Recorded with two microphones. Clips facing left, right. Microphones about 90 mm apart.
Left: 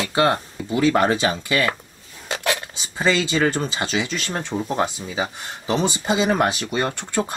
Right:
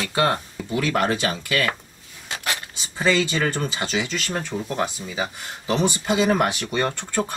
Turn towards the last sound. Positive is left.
turn(degrees=20)  # may be behind; listen again after turning